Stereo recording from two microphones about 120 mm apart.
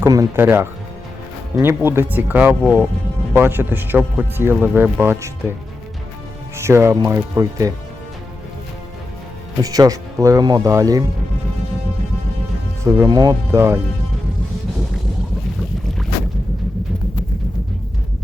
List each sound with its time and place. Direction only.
0.0 s speech: 25° right (ahead or behind)
6.6 s speech: 20° right (ahead or behind)
9.6 s speech: 30° right (ahead or behind)
12.8 s speech: 20° right (ahead or behind)